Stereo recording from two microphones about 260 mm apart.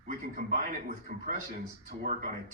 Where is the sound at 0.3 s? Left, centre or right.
Right.